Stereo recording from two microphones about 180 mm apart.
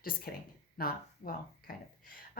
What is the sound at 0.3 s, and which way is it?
Speech, 55° left (ahead or behind).